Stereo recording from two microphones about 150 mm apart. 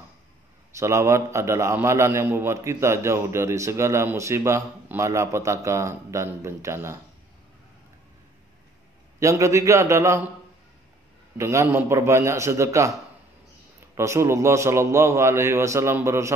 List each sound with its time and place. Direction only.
0.7 s a man's voice: 20° right (ahead or behind)
9.2 s a man's voice: 20° right (ahead or behind)
11.3 s a man's voice: 20° right (ahead or behind)
13.9 s a man's voice: 20° right (ahead or behind)